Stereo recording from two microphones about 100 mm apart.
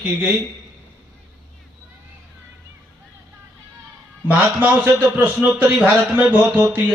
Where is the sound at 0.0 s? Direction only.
20° right (ahead or behind).